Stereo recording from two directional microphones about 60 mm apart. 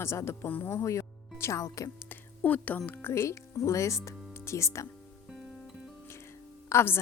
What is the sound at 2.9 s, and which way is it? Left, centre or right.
Speech, left.